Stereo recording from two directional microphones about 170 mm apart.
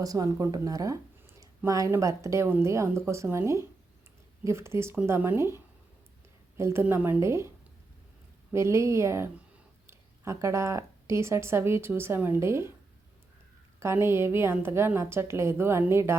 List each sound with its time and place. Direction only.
0.0 s a woman's voice: 20° right (ahead or behind)
8.5 s a woman's voice: 15° right (ahead or behind)
13.7 s a woman's voice: 15° right (ahead or behind)